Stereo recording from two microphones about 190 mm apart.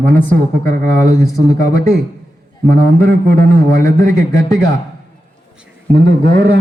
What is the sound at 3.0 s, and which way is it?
Speech, 50° right (ahead or behind).